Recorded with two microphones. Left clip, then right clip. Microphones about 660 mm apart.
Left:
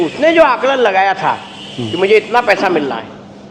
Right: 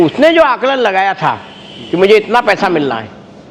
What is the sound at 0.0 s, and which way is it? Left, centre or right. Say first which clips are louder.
A man's voice: right 2 dB; right.